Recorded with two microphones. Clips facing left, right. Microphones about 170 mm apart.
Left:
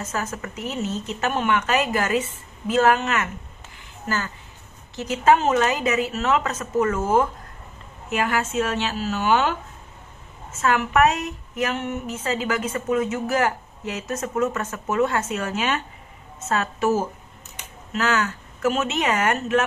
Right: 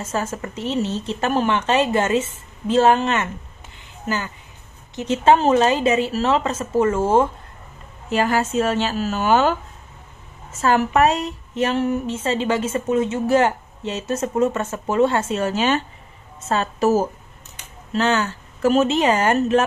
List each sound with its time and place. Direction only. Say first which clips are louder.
0.0 s a woman's voice: right 4 dB; 25° right (ahead or behind)
3.7 s a sound: right 2 dB; 20° right (ahead or behind)
4.9 s a woman's voice: right 2 dB; 25° right (ahead or behind)